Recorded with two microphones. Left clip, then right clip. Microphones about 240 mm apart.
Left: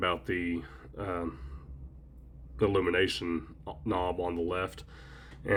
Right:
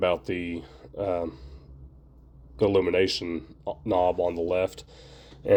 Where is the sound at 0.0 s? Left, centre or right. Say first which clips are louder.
Right 5 dB; centre.